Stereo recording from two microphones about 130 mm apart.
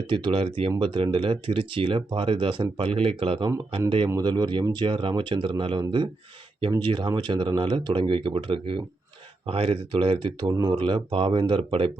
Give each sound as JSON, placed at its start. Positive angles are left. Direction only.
{"t": 0.1, "sound": "speech", "side_deg": -40}